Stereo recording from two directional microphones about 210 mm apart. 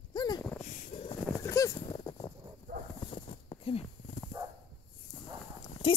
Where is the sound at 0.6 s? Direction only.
30° left (ahead or behind).